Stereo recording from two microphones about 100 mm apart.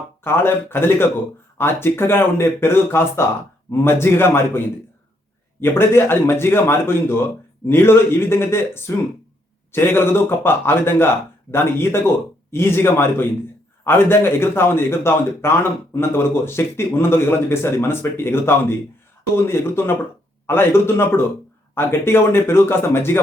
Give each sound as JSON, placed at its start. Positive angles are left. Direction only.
{"t": 0.3, "sound": "speech", "side_deg": 25}